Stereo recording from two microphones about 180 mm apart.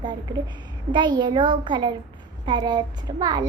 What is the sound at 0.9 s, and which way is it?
A child's voice, 25° right (ahead or behind).